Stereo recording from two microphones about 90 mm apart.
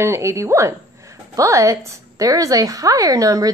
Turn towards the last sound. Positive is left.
turn(degrees=-40)  # may be behind; listen again after turning